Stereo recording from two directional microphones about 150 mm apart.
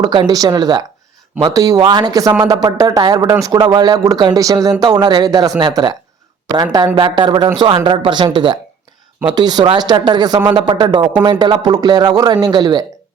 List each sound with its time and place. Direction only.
0.0 s a man's voice: 30° right (ahead or behind)